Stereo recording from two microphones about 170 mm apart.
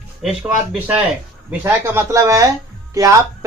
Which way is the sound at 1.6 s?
15° right (ahead or behind).